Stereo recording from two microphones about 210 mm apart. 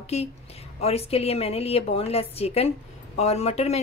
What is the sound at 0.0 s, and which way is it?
A woman's voice, 30° left (ahead or behind).